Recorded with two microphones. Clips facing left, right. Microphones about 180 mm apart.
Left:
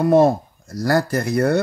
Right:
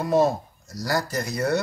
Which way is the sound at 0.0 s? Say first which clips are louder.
Left 6 dB; 55° left (ahead or behind).